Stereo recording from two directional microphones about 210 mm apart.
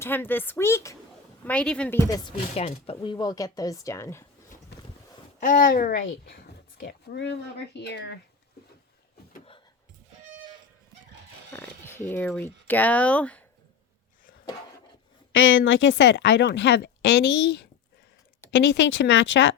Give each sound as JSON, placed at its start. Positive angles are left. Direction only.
{"t": 0.0, "sound": "speech", "side_deg": 10}
{"t": 4.7, "sound": "boat", "side_deg": 55}
{"t": 5.4, "sound": "speech", "side_deg": 40}
{"t": 6.8, "sound": "speech", "side_deg": 55}
{"t": 11.5, "sound": "speech", "side_deg": 10}
{"t": 15.3, "sound": "speech", "side_deg": 70}